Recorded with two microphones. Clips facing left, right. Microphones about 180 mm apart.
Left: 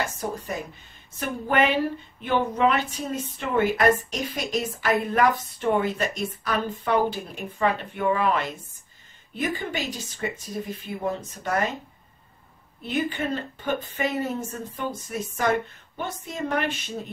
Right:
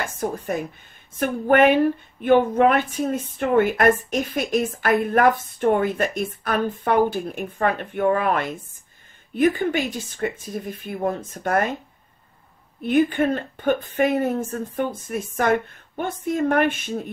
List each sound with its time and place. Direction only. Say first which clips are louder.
0.0 s a woman's voice: right 3 dB; 50° right (ahead or behind)
12.8 s a woman's voice: right 8 dB; 50° right (ahead or behind)